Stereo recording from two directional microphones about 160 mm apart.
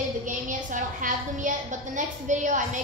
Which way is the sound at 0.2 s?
55° right (ahead or behind).